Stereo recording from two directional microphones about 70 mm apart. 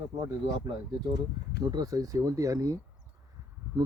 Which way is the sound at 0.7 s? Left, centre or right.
Right.